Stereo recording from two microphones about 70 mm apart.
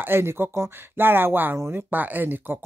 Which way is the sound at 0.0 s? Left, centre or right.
Right.